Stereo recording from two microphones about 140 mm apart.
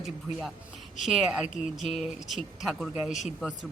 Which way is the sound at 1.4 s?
60° left (ahead or behind).